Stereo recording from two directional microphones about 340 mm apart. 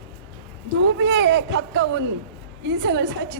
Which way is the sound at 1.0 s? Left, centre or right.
Right.